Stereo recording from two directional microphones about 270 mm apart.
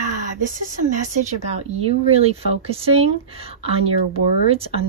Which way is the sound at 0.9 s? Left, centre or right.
Right.